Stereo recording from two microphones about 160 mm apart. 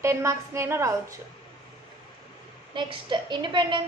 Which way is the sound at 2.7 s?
30° right (ahead or behind).